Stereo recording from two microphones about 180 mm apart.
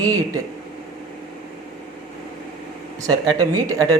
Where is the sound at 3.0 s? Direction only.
20° right (ahead or behind).